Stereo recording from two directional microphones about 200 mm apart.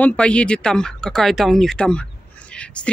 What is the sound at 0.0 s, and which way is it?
Speech, 5° left (ahead or behind).